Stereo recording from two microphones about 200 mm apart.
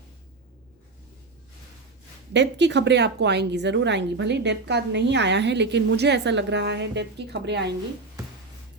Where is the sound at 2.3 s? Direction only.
60° right (ahead or behind).